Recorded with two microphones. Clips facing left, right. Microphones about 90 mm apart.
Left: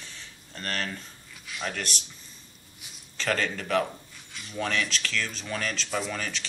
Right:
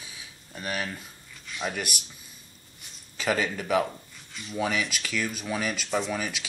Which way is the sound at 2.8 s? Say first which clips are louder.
Left 1 dB; 5° left (ahead or behind).